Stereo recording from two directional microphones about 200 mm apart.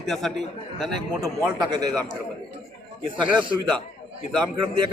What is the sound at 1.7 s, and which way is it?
Speech, 20° right (ahead or behind).